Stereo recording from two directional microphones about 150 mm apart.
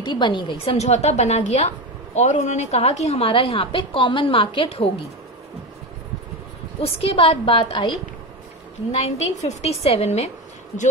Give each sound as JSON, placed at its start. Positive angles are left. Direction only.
{"t": 0.0, "sound": "a woman's voice", "side_deg": 30}
{"t": 0.7, "sound": "a woman's voice", "side_deg": 45}
{"t": 6.8, "sound": "a woman's voice", "side_deg": 40}
{"t": 8.9, "sound": "a woman's voice", "side_deg": 50}